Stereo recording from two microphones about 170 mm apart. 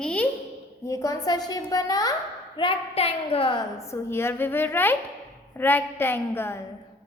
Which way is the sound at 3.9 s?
15° left (ahead or behind).